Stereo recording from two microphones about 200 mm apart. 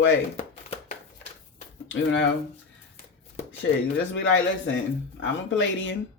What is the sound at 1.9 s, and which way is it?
Speech, 65° left (ahead or behind).